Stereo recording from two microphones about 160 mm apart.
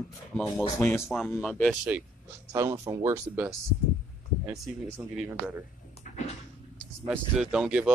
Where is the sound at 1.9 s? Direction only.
10° right (ahead or behind).